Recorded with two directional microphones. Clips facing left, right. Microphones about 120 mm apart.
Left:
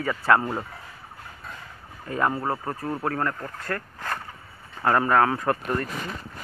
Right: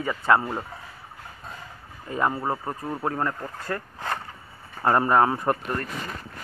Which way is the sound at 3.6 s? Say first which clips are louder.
Even; 20° right (ahead or behind).